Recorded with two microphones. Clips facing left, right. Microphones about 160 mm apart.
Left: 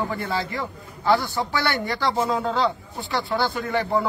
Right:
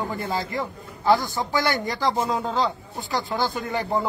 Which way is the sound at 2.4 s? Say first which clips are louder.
Left 2 dB; 15° right (ahead or behind).